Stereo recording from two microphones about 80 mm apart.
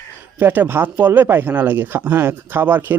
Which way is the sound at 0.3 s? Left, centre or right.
Right.